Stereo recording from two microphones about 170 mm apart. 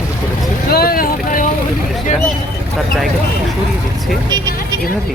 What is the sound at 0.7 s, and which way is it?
Vehicle, 60° left (ahead or behind).